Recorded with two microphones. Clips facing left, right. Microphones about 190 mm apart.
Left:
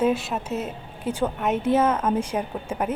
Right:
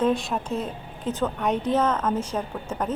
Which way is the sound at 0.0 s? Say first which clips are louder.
Left 1 dB; 5° left (ahead or behind).